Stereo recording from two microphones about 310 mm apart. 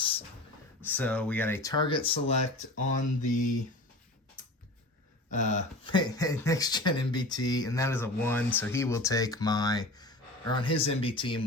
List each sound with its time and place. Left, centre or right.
0.9 s speech: centre; by 3.4 s left
4.4 s mechanisms: left
5.3 s speech: left